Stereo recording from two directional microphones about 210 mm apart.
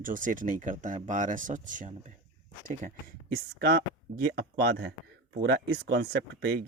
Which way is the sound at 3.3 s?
45° right (ahead or behind).